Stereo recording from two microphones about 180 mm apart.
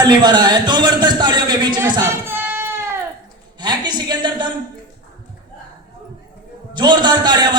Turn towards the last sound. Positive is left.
turn(degrees=-25)  # may be behind; listen again after turning